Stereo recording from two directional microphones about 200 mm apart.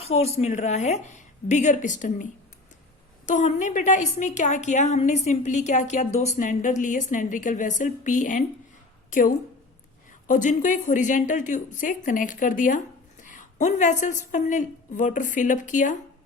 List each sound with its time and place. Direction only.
0.0 s a woman's voice: 30° left (ahead or behind)
3.2 s a woman's voice: 35° left (ahead or behind)